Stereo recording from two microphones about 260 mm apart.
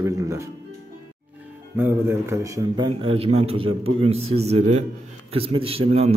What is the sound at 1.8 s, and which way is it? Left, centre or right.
A man's voice, centre.